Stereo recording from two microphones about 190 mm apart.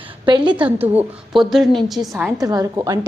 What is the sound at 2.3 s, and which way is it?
Speech, 20° right (ahead or behind).